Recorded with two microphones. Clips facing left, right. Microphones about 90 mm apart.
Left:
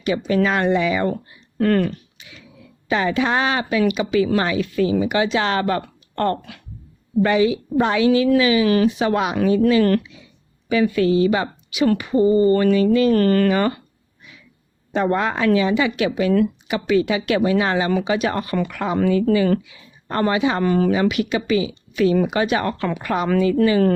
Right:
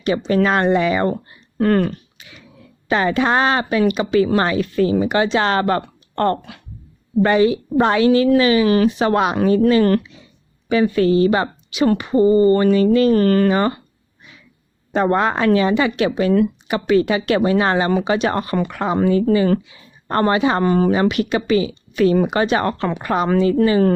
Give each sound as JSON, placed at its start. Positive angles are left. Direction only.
{"t": 0.3, "sound": "a woman's voice", "side_deg": -45}
{"t": 1.5, "sound": "a woman's voice", "side_deg": -30}
{"t": 2.9, "sound": "a woman's voice", "side_deg": -45}
{"t": 13.1, "sound": "speech", "side_deg": -20}
{"t": 14.9, "sound": "a woman's voice", "side_deg": -40}
{"t": 19.6, "sound": "a sound", "side_deg": -30}
{"t": 20.1, "sound": "a woman's voice", "side_deg": -45}
{"t": 20.7, "sound": "a woman's voice", "side_deg": -30}
{"t": 20.9, "sound": "a woman's voice", "side_deg": -45}